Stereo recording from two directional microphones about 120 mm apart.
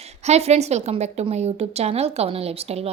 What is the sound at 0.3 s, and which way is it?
Speech, 60° right (ahead or behind).